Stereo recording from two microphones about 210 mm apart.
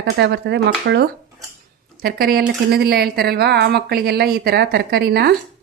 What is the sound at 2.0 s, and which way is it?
Speech, 45° right (ahead or behind).